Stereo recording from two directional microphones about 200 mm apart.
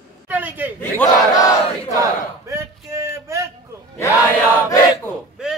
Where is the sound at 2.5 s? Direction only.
15° right (ahead or behind).